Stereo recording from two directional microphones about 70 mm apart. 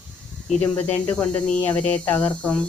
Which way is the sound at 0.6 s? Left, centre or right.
Left.